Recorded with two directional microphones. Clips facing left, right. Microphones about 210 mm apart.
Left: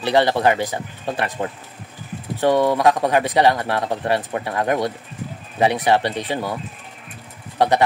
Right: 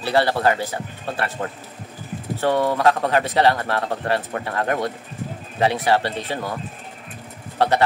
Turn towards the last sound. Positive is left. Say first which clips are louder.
# left 1 dB
turn(degrees=15)  # may be behind; listen again after turning